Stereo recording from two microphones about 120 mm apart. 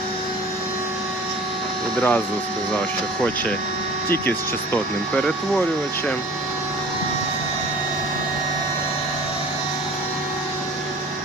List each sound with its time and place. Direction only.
2.0 s speech: 10° left (ahead or behind)
4.1 s speech: 15° left (ahead or behind)